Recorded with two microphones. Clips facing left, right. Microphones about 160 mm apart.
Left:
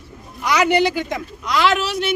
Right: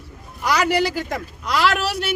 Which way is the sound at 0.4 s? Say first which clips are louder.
Left 3 dB; 5° right (ahead or behind).